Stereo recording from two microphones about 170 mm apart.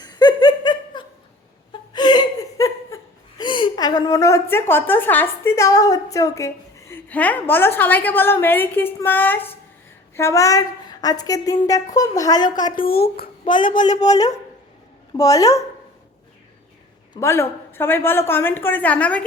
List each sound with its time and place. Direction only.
0.0 s laughter: 25° left (ahead or behind)
10.2 s a woman's voice: 15° left (ahead or behind)
12.7 s speech: 60° left (ahead or behind)
13.4 s a woman's voice: 30° left (ahead or behind)
17.2 s a woman's voice: 15° left (ahead or behind)